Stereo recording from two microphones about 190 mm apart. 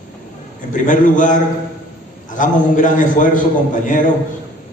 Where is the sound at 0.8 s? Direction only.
40° left (ahead or behind).